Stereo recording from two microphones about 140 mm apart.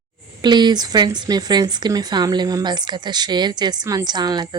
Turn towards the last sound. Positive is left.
turn(degrees=-30)  # may be behind; listen again after turning